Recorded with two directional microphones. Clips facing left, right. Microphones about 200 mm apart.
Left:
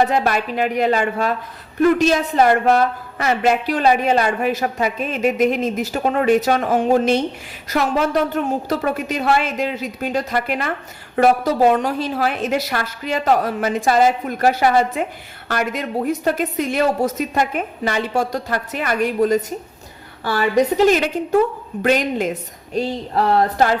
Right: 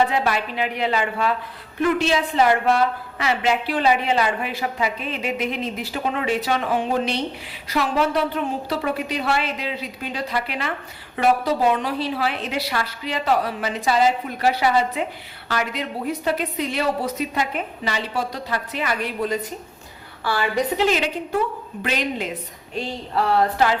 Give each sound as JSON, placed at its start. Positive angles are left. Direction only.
{"t": 0.0, "sound": "a woman's voice", "side_deg": 45}